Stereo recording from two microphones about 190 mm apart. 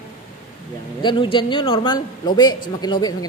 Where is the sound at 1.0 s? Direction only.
25° left (ahead or behind).